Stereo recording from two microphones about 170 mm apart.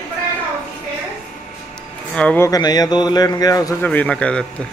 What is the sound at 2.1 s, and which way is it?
Speech, 10° left (ahead or behind).